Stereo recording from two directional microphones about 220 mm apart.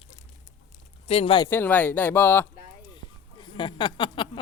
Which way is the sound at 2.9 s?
20° left (ahead or behind).